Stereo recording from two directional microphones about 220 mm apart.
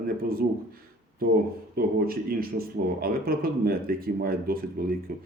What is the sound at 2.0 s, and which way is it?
Speech, 40° right (ahead or behind).